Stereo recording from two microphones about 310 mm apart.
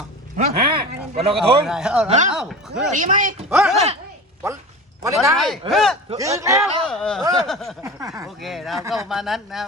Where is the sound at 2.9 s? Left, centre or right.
Right.